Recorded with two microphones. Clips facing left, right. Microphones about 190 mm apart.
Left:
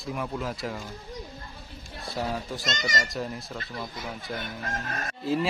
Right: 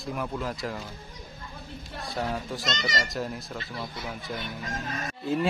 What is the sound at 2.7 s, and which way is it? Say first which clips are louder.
Speech: even; 45° left (ahead or behind).